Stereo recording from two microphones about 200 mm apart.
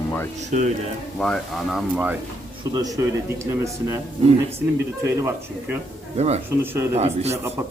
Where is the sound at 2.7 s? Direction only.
15° right (ahead or behind).